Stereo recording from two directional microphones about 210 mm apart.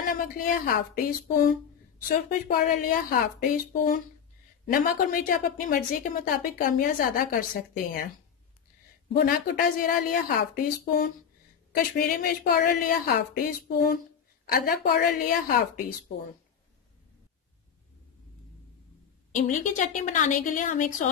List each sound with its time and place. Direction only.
0.1 s a woman's voice: 40° left (ahead or behind)
2.4 s a woman's voice: 40° left (ahead or behind)
9.1 s a woman's voice: 45° left (ahead or behind)
19.3 s a woman's voice: 35° left (ahead or behind)